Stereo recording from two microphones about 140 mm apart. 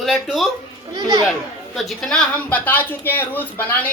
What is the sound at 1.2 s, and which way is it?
Speech, centre (ahead or behind).